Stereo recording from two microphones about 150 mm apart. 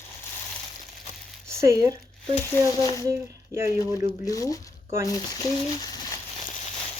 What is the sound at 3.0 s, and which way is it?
Speech, 20° right (ahead or behind).